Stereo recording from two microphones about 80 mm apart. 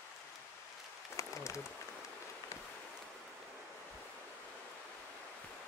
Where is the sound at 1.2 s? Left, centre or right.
Left.